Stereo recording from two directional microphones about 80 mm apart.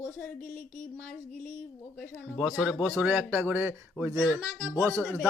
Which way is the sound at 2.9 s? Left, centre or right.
Centre.